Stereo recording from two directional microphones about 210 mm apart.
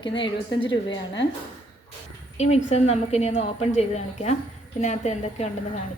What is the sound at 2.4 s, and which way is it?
A woman's voice, 30° left (ahead or behind).